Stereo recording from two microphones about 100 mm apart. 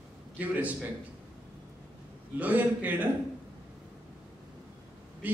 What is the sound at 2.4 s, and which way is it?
Speech, 15° right (ahead or behind).